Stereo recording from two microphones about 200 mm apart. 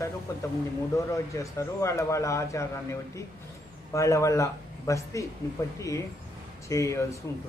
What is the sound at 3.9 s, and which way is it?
A man's voice, 15° left (ahead or behind).